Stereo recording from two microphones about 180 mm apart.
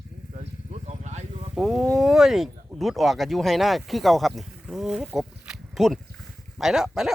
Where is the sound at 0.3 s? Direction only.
40° right (ahead or behind).